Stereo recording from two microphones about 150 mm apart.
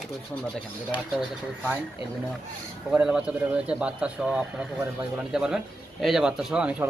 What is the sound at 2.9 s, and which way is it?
Speech, 5° right (ahead or behind).